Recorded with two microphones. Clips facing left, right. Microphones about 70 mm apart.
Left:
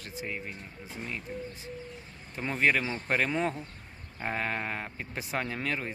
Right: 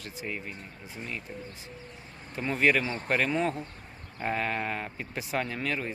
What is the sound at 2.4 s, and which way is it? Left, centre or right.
Speech, left.